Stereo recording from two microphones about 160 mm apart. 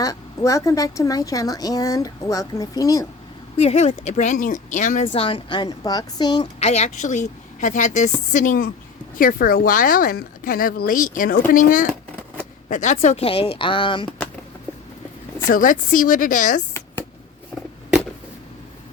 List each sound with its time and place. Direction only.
0.0 s speech: 20° left (ahead or behind)
3.6 s a woman's voice: 40° left (ahead or behind)
5.1 s speech: 35° left (ahead or behind)
6.6 s a woman's voice: 45° left (ahead or behind)
15.4 s a woman's voice: 60° left (ahead or behind)